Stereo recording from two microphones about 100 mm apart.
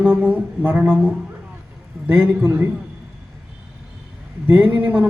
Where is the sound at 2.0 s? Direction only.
15° right (ahead or behind).